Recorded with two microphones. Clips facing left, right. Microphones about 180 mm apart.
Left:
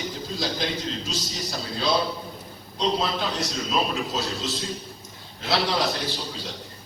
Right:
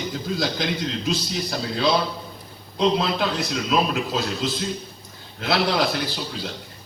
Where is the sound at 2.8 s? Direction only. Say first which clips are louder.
Right 4 dB; 70° right (ahead or behind).